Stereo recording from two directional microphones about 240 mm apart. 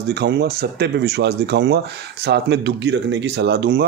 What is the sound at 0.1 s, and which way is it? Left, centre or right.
Speech, right.